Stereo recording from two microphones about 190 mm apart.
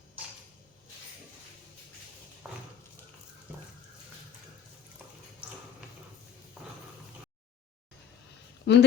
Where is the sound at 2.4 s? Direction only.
5° right (ahead or behind).